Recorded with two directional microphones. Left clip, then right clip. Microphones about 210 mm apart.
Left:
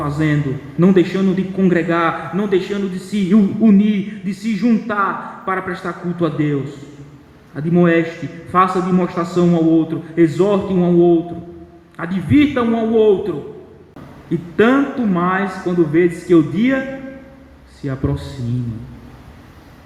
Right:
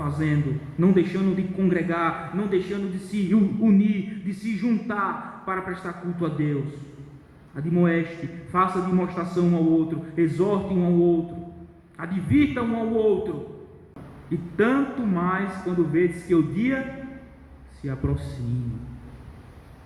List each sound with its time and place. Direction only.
0.0 s a man's voice: 50° left (ahead or behind)
14.5 s a man's voice: 50° left (ahead or behind)